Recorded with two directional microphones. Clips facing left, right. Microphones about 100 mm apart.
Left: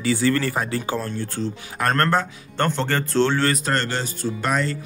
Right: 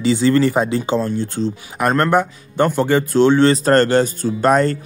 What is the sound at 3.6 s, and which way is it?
Speech, 45° right (ahead or behind).